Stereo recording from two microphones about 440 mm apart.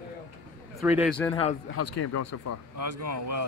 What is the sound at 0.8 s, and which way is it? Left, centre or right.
Speech, centre.